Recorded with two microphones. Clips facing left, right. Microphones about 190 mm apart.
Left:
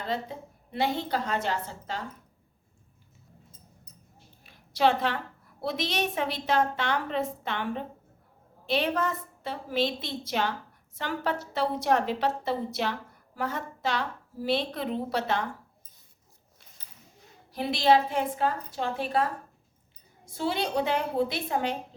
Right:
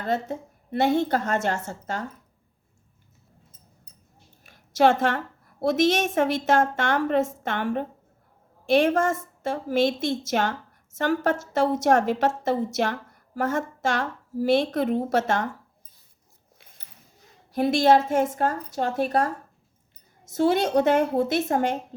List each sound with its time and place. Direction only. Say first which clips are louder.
0.0 s a woman's voice: right 6 dB; 45° right (ahead or behind)
4.4 s a woman's voice: right 5 dB; 45° right (ahead or behind)
17.5 s a woman's voice: right 4 dB; 45° right (ahead or behind)